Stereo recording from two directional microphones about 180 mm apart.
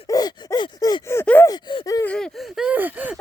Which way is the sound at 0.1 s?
20° left (ahead or behind).